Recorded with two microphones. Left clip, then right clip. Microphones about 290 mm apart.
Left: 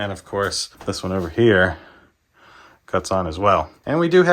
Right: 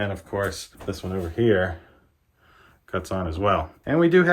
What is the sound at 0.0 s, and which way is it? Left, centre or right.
Speech, centre.